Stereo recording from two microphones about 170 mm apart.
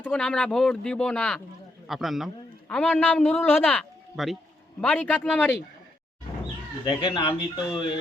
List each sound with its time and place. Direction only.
0.0 s a man's voice: 5° left (ahead or behind)
6.8 s speech: 25° left (ahead or behind)